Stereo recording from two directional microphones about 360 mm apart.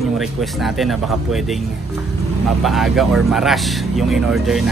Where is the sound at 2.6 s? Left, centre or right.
Centre.